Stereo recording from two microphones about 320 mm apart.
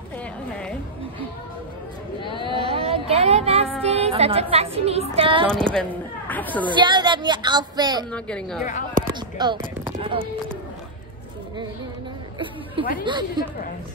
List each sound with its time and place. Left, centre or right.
2.2 s a sound: centre
2.5 s a sound: centre
3.8 s a woman's voice: centre
5.5 s speech: centre
6.6 s a woman's voice: centre
8.1 s speech: centre
9.4 s speech: centre
13.0 s a woman's voice: centre